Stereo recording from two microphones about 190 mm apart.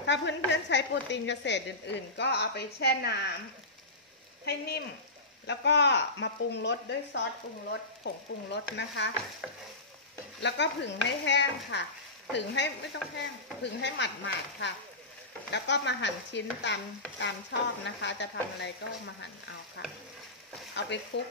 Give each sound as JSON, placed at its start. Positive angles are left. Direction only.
{"t": 0.0, "sound": "speech", "side_deg": 70}
{"t": 4.5, "sound": "speech", "side_deg": 60}
{"t": 10.4, "sound": "speech", "side_deg": 65}
{"t": 19.8, "sound": "speech", "side_deg": 70}